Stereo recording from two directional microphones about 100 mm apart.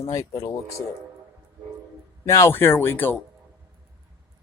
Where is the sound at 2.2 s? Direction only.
30° left (ahead or behind).